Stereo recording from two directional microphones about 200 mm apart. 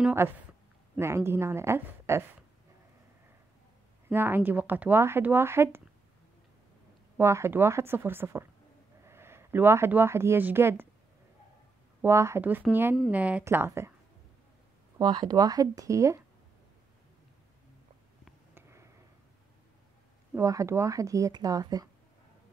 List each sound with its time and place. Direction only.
0.0 s a woman's voice: 10° right (ahead or behind)
4.1 s a woman's voice: 10° right (ahead or behind)
7.2 s a woman's voice: 15° right (ahead or behind)
12.0 s a woman's voice: 15° right (ahead or behind)
15.0 s a woman's voice: 20° right (ahead or behind)
18.5 s a sound: 15° right (ahead or behind)
20.3 s a woman's voice: 15° right (ahead or behind)